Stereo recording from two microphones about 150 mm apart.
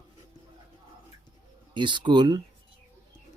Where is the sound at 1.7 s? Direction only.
30° right (ahead or behind).